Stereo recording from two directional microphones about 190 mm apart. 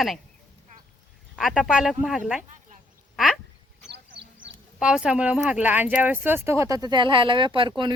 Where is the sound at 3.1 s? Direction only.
Centre (ahead or behind).